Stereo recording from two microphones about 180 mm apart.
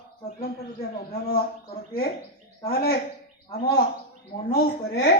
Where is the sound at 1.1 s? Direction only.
55° left (ahead or behind).